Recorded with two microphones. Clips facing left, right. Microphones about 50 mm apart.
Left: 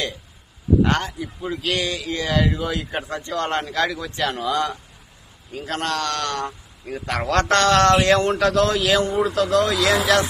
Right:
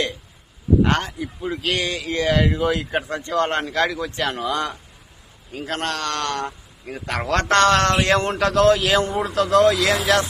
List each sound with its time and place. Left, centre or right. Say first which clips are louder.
0.8 s a man's voice: right 1 dB; centre
3.5 s a man's voice: right 1 dB; right
5.5 s a man's voice: left 1 dB; right
6.4 s a man's voice: even; centre
7.3 s a man's voice: even; right